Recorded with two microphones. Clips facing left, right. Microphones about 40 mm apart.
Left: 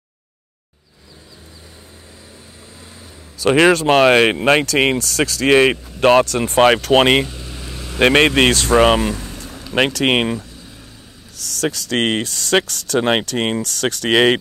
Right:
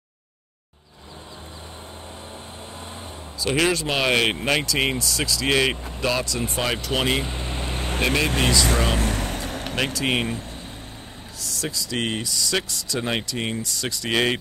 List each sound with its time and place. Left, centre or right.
3.3 s speech: left
4.4 s speech: left
7.2 s vehicle: right
8.0 s speech: left
9.1 s vehicle: right
9.8 s speech: left